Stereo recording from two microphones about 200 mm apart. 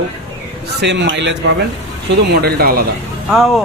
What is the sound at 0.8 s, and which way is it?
A man's voice, 60° right (ahead or behind).